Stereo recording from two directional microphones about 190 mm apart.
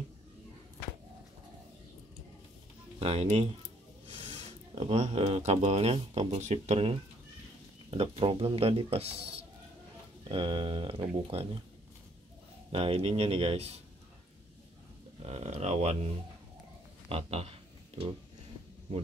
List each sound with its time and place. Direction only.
3.0 s speech: 30° right (ahead or behind)
8.0 s speech: 30° right (ahead or behind)
10.2 s speech: 25° right (ahead or behind)
12.7 s speech: 30° right (ahead or behind)
15.2 s speech: 35° right (ahead or behind)
17.1 s speech: 30° right (ahead or behind)